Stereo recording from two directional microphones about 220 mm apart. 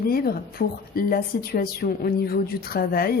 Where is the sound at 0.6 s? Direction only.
45° left (ahead or behind).